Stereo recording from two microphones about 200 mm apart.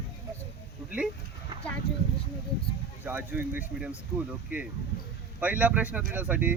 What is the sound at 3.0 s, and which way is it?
Speech, 10° right (ahead or behind).